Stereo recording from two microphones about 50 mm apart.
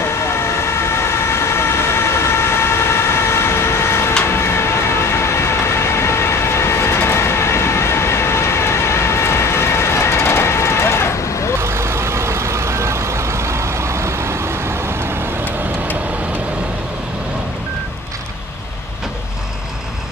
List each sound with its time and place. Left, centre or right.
0.7 s emergency vehicle: left
4.3 s vehicle: left
11.6 s vehicle: right